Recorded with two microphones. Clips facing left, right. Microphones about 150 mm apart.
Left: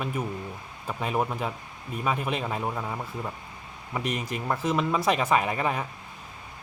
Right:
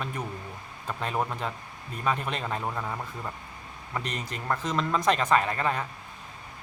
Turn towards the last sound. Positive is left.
turn(degrees=10)  # may be behind; listen again after turning